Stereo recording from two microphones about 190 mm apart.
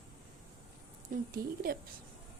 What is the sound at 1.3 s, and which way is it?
Speech, 50° right (ahead or behind).